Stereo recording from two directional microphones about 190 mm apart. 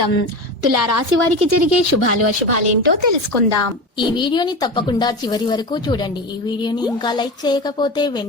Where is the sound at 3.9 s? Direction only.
25° left (ahead or behind).